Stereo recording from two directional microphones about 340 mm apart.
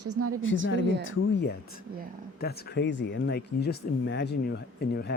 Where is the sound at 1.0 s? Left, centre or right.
Left.